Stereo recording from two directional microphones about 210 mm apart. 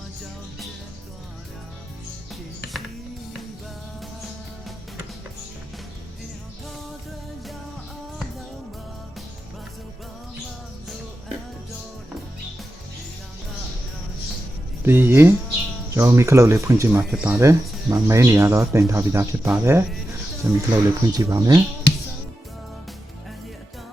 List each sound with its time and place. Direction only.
14.8 s speech: 10° right (ahead or behind)